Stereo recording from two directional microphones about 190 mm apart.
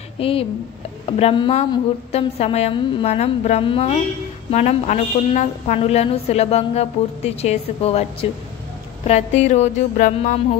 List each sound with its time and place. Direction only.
0.2 s a woman's voice: 30° left (ahead or behind)